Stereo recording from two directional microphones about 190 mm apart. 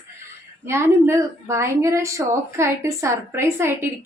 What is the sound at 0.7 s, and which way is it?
A woman's voice, 15° right (ahead or behind).